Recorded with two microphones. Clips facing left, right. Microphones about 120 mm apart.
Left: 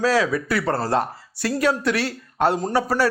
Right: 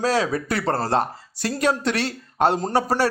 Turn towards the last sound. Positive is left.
turn(degrees=-30)  # may be behind; listen again after turning